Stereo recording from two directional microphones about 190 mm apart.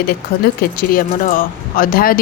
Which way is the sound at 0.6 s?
50° left (ahead or behind).